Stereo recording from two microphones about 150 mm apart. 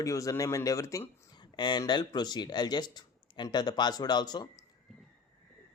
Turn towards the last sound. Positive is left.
turn(degrees=25)  # may be behind; listen again after turning